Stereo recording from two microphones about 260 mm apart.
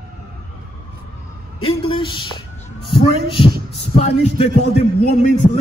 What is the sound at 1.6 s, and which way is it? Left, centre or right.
Speech, left.